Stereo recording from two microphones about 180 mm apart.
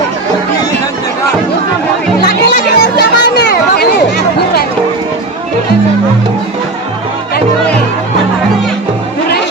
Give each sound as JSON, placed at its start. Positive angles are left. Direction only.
{"t": 2.2, "sound": "music", "side_deg": 65}